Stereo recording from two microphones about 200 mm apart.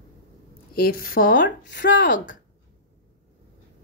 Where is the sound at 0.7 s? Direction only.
50° left (ahead or behind).